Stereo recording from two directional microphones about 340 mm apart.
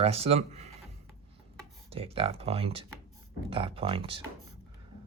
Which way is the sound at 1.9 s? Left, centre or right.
Centre.